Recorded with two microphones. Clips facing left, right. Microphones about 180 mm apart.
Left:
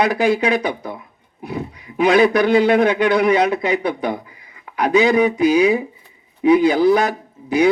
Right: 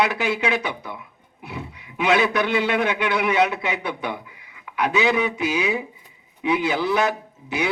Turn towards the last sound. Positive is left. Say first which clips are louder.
# left 9 dB
turn(degrees=40)  # may be behind; listen again after turning